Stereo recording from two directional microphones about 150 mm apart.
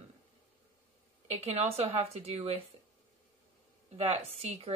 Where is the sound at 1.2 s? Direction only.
45° right (ahead or behind).